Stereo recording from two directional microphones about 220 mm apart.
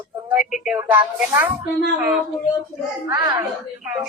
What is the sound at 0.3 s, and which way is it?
Speech, centre (ahead or behind).